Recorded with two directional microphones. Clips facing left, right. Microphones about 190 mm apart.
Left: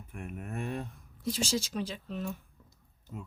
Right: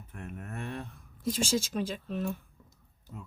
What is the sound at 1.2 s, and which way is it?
Speech, 50° right (ahead or behind).